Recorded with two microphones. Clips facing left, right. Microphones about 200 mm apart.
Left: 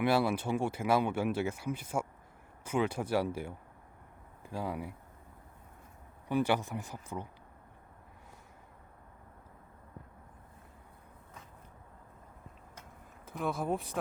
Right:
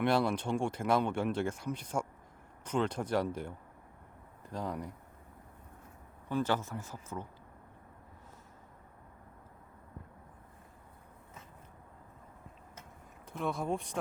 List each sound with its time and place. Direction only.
0.0 s speech: 5° left (ahead or behind)
6.2 s speech: 15° left (ahead or behind)
13.2 s speech: centre (ahead or behind)